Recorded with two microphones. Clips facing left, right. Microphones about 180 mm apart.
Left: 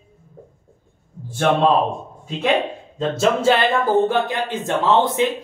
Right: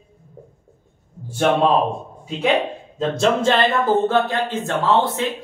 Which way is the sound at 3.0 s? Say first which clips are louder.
Even; 5° left (ahead or behind).